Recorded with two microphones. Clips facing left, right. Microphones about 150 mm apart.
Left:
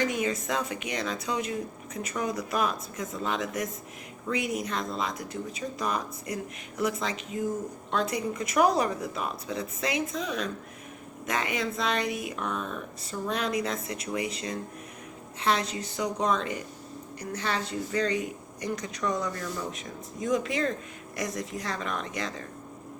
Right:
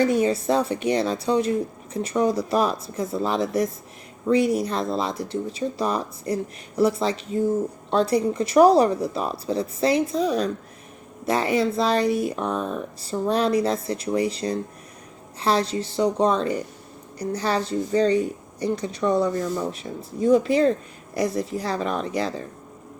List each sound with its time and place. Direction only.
0.0 s a woman's voice: 35° right (ahead or behind)